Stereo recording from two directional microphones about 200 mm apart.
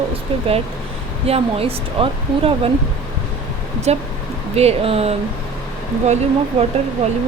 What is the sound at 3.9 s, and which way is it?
Speech, 35° right (ahead or behind).